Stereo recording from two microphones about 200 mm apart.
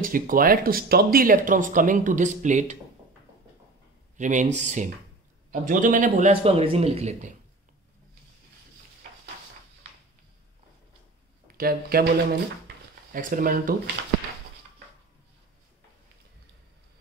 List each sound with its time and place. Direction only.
0.0 s speech: 45° right (ahead or behind)
4.2 s a man's voice: 40° right (ahead or behind)
11.4 s speech: 50° right (ahead or behind)
13.1 s speech: 45° right (ahead or behind)